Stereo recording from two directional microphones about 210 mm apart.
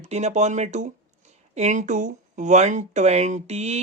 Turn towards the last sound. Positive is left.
turn(degrees=-30)  # may be behind; listen again after turning